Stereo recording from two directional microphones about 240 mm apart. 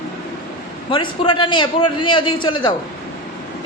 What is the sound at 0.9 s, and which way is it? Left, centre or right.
A man's voice, centre.